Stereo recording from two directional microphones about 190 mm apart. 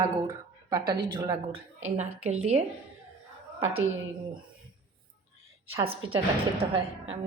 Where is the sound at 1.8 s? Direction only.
35° right (ahead or behind).